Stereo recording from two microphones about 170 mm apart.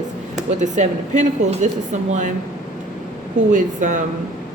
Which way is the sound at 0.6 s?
45° right (ahead or behind).